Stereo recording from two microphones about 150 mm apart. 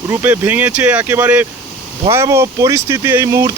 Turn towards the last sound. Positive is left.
turn(degrees=-20)  # may be behind; listen again after turning